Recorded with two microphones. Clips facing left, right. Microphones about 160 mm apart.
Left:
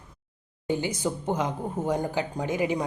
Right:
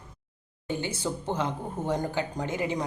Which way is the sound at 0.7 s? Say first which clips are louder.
Left 3 dB; 15° left (ahead or behind).